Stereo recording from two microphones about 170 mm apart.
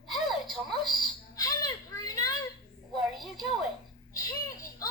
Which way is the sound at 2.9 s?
Centre (ahead or behind).